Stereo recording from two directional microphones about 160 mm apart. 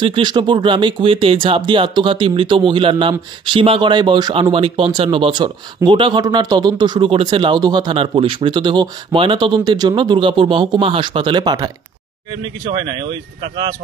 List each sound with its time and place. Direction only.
0.0 s speech: 30° right (ahead or behind)